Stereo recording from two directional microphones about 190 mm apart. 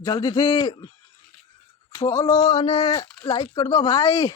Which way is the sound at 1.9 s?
15° left (ahead or behind).